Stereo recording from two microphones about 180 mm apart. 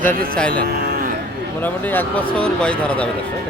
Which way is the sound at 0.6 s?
60° right (ahead or behind).